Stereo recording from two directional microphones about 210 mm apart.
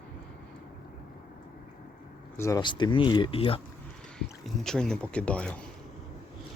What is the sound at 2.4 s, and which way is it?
Speech, 15° left (ahead or behind).